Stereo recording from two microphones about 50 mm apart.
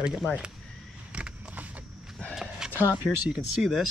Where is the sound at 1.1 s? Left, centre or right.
Right.